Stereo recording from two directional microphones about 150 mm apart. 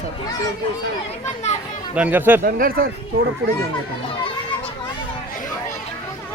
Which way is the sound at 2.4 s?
70° right (ahead or behind).